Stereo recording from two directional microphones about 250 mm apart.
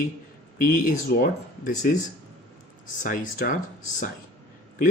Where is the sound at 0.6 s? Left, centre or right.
Left.